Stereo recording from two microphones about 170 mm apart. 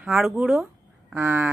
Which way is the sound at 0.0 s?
Centre (ahead or behind).